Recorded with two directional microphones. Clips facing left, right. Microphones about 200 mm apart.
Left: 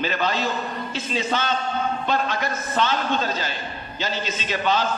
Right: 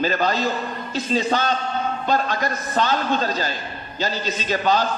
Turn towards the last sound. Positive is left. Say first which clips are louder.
# right 3 dB
turn(degrees=-40)  # may be behind; listen again after turning